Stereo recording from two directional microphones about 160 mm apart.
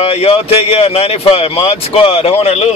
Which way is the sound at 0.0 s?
40° left (ahead or behind).